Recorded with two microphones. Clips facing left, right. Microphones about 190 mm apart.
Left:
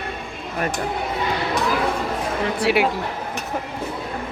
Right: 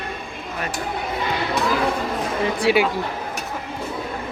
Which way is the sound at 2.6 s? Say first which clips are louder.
Right 1 dB; 5° left (ahead or behind).